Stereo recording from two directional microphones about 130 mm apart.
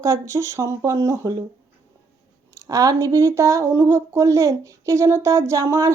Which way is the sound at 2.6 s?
25° right (ahead or behind).